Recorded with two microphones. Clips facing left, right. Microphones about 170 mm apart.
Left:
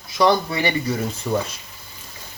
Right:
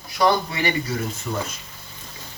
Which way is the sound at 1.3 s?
40° left (ahead or behind).